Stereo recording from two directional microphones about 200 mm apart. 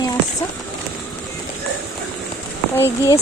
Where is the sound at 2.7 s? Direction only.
15° left (ahead or behind).